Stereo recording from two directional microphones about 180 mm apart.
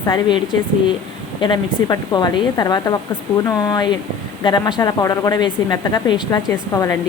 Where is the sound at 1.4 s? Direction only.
25° left (ahead or behind).